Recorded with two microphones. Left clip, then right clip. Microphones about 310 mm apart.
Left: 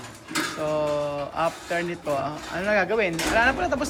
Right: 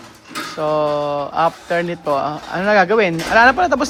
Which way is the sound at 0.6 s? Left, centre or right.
Centre.